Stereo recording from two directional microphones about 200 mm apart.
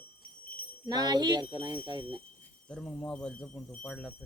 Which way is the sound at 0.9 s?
20° right (ahead or behind).